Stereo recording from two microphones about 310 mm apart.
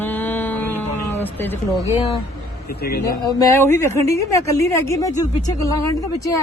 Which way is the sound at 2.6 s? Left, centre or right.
Left.